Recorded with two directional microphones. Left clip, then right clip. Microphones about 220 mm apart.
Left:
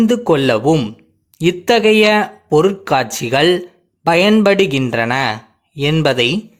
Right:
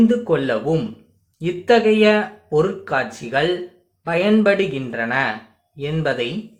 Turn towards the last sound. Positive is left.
turn(degrees=50)  # may be behind; listen again after turning